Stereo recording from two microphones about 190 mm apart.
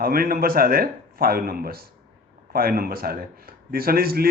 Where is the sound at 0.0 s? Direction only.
50° right (ahead or behind).